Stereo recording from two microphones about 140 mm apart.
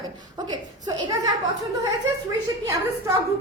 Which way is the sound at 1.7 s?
25° right (ahead or behind).